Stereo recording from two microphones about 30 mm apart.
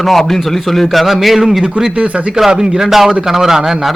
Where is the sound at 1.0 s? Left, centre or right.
Centre.